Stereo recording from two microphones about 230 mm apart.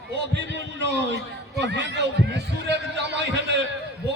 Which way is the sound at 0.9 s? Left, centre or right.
Right.